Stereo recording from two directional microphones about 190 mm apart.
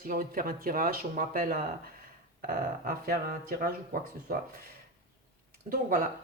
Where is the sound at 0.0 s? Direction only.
45° right (ahead or behind).